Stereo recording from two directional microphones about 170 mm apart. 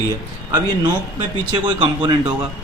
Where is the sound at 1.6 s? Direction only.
30° right (ahead or behind).